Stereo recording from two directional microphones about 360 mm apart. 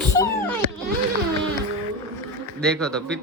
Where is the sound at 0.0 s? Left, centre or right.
Centre.